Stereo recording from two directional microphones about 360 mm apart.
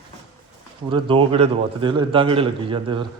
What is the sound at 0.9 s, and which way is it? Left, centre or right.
A man's voice, centre.